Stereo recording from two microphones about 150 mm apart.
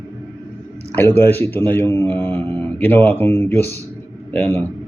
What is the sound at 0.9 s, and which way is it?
A man's voice, 15° left (ahead or behind).